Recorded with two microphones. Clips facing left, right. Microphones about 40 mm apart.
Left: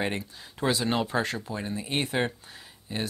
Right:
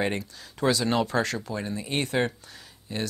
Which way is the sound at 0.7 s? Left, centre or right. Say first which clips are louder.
Right 2 dB; left.